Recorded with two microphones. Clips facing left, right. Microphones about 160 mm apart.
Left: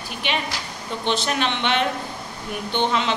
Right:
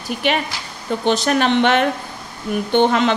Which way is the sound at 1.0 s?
45° right (ahead or behind).